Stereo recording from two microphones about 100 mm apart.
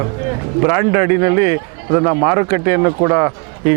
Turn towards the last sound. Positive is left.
turn(degrees=-30)  # may be behind; listen again after turning